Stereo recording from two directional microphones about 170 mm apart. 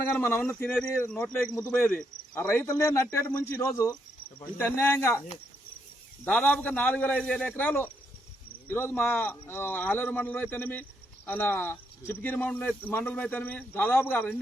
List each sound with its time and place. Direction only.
0.2 s speech: 15° left (ahead or behind)
6.2 s speech: 5° left (ahead or behind)